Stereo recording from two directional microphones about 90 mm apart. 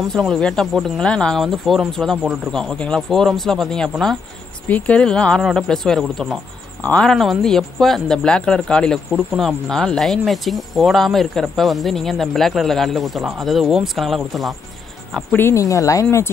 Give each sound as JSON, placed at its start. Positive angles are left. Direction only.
{"t": 0.1, "sound": "speech", "side_deg": 5}
{"t": 1.4, "sound": "speech", "side_deg": 0}
{"t": 15.3, "sound": "speech", "side_deg": 25}
{"t": 15.6, "sound": "speech", "side_deg": 40}